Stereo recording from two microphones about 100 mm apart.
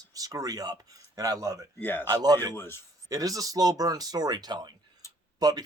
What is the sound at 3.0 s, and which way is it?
Speech, 35° right (ahead or behind).